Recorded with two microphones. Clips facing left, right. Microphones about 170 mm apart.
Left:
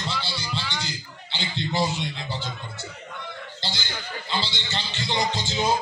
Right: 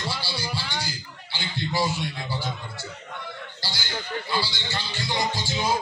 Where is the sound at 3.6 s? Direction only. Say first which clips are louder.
Left 5 dB; 20° left (ahead or behind).